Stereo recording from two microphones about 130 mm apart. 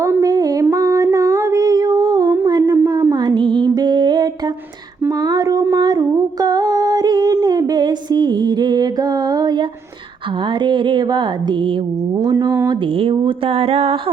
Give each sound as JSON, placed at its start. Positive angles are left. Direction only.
{"t": 0.0, "sound": "a sound", "side_deg": -25}
{"t": 2.7, "sound": "music", "side_deg": -20}
{"t": 5.0, "sound": "humming", "side_deg": -30}
{"t": 7.4, "sound": "music", "side_deg": -30}
{"t": 12.2, "sound": "speech", "side_deg": -25}
{"t": 13.0, "sound": "a sound", "side_deg": -45}